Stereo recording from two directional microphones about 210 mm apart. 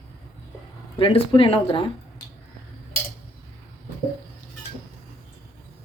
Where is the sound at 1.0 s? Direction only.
25° left (ahead or behind).